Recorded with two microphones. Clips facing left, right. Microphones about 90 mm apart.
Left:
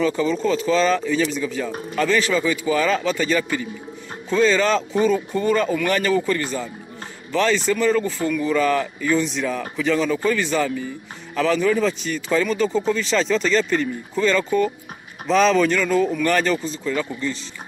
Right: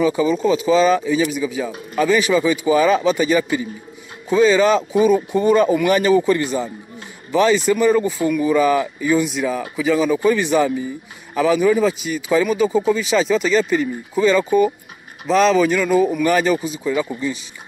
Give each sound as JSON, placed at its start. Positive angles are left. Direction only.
{"t": 0.0, "sound": "speech", "side_deg": -10}